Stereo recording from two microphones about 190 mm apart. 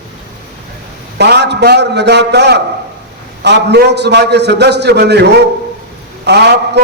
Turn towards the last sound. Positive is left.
turn(degrees=-60)  # may be behind; listen again after turning